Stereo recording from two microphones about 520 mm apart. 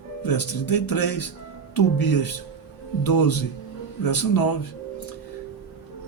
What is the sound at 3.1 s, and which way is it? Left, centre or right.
Speech, left.